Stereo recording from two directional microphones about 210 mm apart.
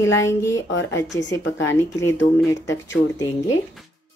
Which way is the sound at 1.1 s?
60° left (ahead or behind).